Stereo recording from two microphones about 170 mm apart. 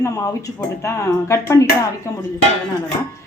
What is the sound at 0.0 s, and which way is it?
Speech, 20° left (ahead or behind).